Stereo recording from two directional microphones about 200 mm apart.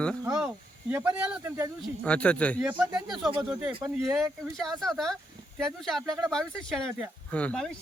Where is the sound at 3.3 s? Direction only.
25° right (ahead or behind).